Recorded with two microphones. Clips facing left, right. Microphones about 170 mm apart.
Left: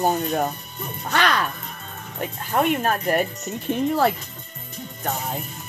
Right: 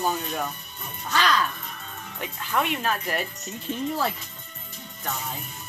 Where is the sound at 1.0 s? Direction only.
60° left (ahead or behind).